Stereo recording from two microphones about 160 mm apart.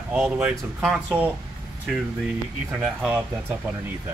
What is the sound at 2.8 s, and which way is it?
Speech, centre (ahead or behind).